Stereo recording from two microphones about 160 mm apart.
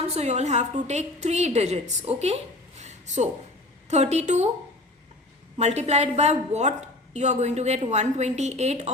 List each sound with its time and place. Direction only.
0.0 s a woman's voice: 40° right (ahead or behind)
5.5 s a woman's voice: 45° right (ahead or behind)